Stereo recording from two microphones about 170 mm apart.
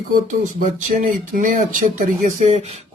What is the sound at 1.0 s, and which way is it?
Speech, 50° right (ahead or behind).